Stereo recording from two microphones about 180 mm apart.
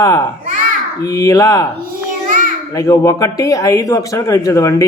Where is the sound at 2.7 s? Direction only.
20° left (ahead or behind).